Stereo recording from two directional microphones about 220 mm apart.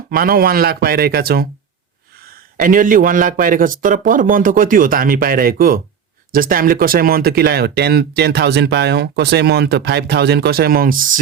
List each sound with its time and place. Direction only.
0.1 s speech: 40° right (ahead or behind)
2.6 s a man's voice: 40° right (ahead or behind)